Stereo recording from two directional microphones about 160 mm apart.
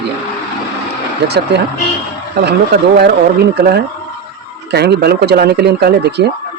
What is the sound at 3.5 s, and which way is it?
Speech, 85° right.